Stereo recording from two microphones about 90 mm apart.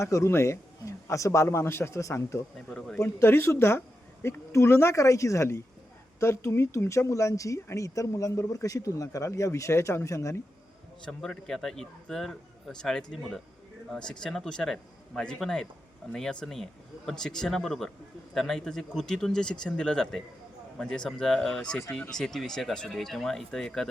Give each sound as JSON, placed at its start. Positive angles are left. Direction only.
{"t": 0.0, "sound": "speech", "side_deg": 35}
{"t": 2.6, "sound": "a man's voice", "side_deg": 10}
{"t": 3.0, "sound": "a woman's voice", "side_deg": 30}
{"t": 11.0, "sound": "a man's voice", "side_deg": 5}